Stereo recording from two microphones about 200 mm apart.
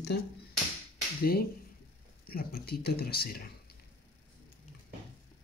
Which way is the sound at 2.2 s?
50° left (ahead or behind).